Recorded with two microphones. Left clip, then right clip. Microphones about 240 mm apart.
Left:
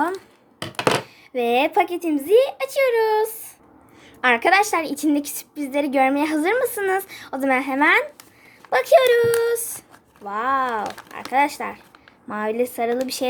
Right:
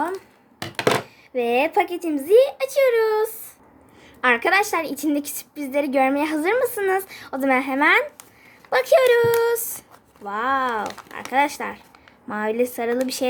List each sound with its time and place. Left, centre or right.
1.0 s a woman's voice: centre